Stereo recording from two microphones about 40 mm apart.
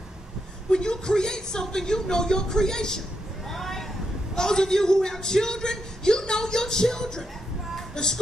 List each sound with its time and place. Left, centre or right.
0.7 s a man's voice: left
3.4 s a sound: centre
4.4 s a man's voice: centre
7.9 s music: centre